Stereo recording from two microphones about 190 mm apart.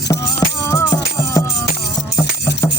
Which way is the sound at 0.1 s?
15° left (ahead or behind).